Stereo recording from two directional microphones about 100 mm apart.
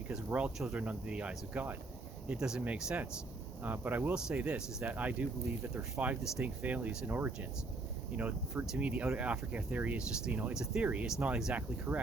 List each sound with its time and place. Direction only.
0.1 s speech: 15° right (ahead or behind)